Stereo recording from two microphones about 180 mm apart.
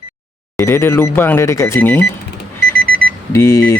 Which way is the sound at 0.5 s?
15° left (ahead or behind).